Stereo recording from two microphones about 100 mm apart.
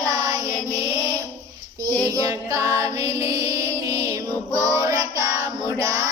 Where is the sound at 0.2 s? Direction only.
35° right (ahead or behind).